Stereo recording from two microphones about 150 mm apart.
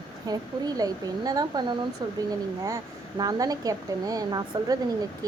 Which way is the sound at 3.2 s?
25° right (ahead or behind).